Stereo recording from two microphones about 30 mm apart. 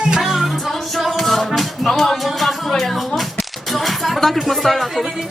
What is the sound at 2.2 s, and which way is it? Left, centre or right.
Speech, centre.